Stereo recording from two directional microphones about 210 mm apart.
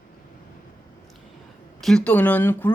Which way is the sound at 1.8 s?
5° left (ahead or behind).